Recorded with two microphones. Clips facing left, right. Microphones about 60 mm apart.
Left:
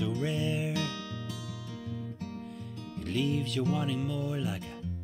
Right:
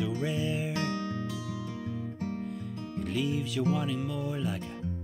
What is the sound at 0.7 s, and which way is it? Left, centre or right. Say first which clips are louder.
Music: right 3 dB; right.